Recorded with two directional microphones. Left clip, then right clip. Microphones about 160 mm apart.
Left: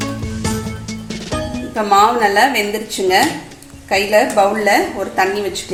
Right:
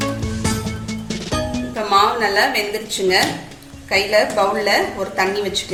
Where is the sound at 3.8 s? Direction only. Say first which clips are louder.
Left 3 dB; 50° left (ahead or behind).